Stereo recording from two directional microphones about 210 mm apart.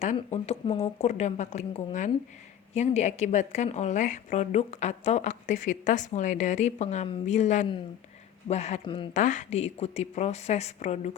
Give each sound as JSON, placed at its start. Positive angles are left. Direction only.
{"t": 0.0, "sound": "a woman's voice", "side_deg": 35}
{"t": 9.1, "sound": "a woman's voice", "side_deg": 35}